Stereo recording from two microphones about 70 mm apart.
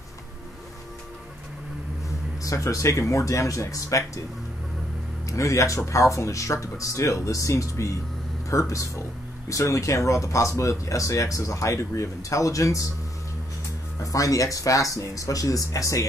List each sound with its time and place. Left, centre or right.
2.4 s speech: left
5.3 s speech: left
14.0 s speech: left